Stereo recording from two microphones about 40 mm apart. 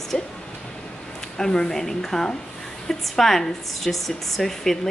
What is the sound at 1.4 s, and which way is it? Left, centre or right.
A woman's voice, centre.